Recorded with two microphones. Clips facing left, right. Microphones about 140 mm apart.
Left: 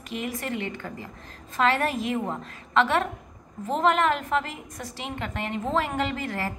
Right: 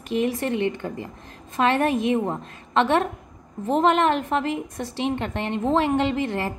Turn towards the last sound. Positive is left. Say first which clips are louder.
# right 5 dB
turn(degrees=-25)  # may be behind; listen again after turning